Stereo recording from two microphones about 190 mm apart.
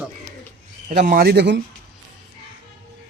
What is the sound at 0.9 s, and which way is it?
Speech, 50° right (ahead or behind).